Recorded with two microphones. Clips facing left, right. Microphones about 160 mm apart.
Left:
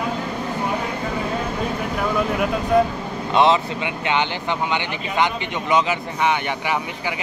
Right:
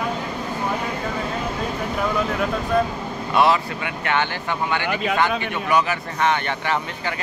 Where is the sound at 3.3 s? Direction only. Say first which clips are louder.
Left 2 dB; 20° left (ahead or behind).